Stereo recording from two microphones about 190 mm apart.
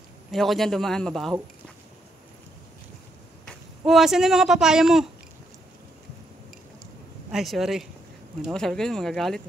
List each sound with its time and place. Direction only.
0.3 s a man's voice: centre (ahead or behind)
3.4 s speech: centre (ahead or behind)
7.2 s a man's voice: centre (ahead or behind)